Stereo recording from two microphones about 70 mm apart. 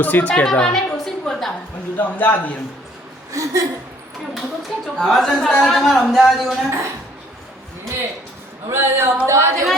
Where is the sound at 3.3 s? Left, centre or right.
Right.